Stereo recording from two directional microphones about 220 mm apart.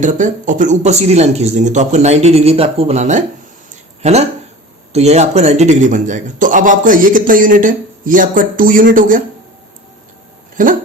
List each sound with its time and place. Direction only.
0.0 s speech: 35° right (ahead or behind)
10.6 s speech: 35° right (ahead or behind)